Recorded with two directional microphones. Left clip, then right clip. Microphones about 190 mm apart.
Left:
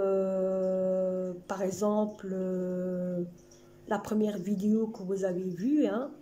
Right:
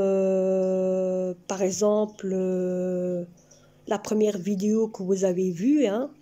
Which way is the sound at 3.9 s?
5° right (ahead or behind).